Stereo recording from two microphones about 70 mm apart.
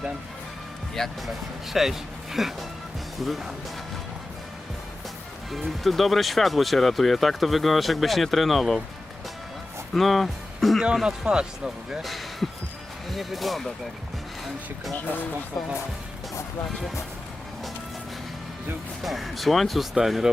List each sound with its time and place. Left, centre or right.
0.9 s speech: centre
5.5 s speech: centre
9.9 s speech: centre
12.0 s speech: centre
15.0 s speech: left
19.0 s speech: centre